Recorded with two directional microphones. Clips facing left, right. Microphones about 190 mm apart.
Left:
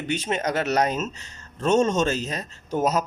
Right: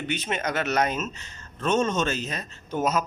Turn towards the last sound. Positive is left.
turn(degrees=40)  # may be behind; listen again after turning